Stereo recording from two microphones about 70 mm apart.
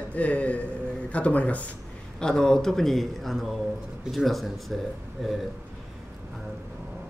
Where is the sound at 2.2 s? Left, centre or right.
Centre.